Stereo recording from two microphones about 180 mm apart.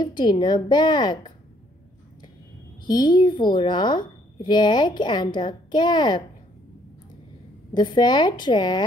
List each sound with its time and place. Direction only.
0.0 s a woman's voice: 25° left (ahead or behind)
2.9 s a woman's voice: 25° left (ahead or behind)
7.7 s a woman's voice: 25° left (ahead or behind)